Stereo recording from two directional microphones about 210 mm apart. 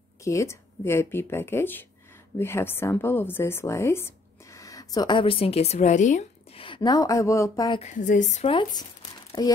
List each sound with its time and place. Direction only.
0.2 s a woman's voice: 15° left (ahead or behind)
7.8 s a woman's voice: 35° left (ahead or behind)
8.5 s speech: 20° left (ahead or behind)